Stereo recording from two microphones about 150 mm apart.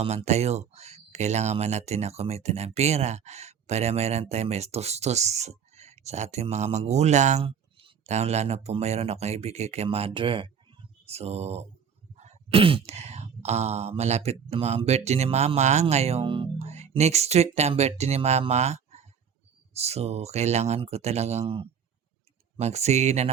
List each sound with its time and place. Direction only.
0.0 s speech: 45° right (ahead or behind)
7.4 s speech: 35° right (ahead or behind)